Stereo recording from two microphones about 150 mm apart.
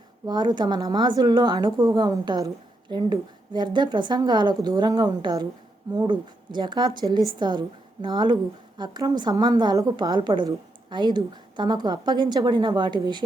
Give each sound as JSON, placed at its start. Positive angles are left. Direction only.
{"t": 0.3, "sound": "a woman's voice", "side_deg": -30}